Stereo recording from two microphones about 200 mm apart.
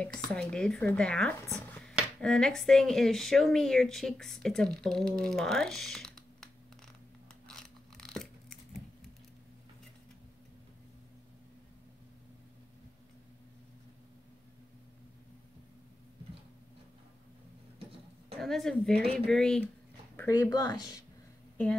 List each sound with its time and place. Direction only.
0.3 s speech: 5° left (ahead or behind)
1.8 s speech: centre (ahead or behind)
7.4 s a sound: 5° left (ahead or behind)
18.3 s speech: centre (ahead or behind)
20.2 s speech: 15° left (ahead or behind)